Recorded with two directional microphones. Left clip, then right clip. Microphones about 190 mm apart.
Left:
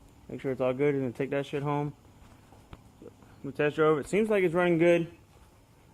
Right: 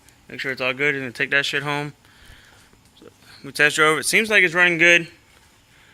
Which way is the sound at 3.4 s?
15° right (ahead or behind).